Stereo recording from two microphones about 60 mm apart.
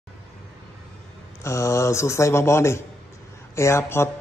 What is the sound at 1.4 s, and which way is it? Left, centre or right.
A man's voice, left.